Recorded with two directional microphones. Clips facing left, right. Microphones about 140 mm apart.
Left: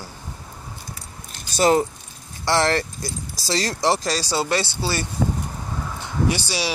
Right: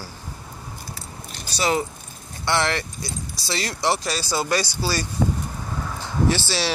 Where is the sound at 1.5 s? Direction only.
45° left (ahead or behind); by 5.1 s 25° left (ahead or behind).